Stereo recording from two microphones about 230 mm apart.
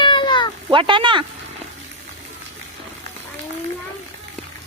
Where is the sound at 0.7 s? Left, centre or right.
Right.